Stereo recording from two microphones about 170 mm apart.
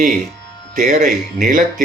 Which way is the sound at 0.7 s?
45° right (ahead or behind).